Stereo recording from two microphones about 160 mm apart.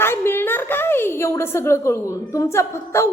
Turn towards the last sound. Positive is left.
turn(degrees=15)  # may be behind; listen again after turning